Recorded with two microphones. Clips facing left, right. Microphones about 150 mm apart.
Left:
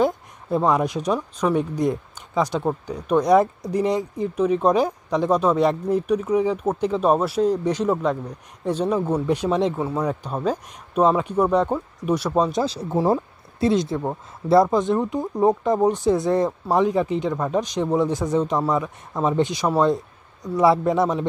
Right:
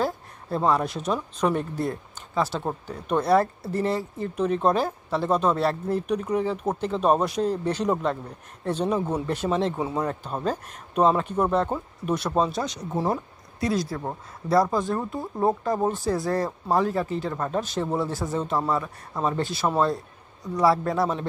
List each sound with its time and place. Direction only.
0.7 s speech: 15° left (ahead or behind)
9.8 s speech: 10° right (ahead or behind)
10.0 s speech: 10° left (ahead or behind)
12.6 s speech: 30° left (ahead or behind)